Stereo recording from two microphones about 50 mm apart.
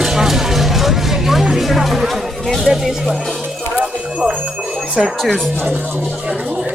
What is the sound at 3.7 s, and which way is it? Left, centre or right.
Music, centre.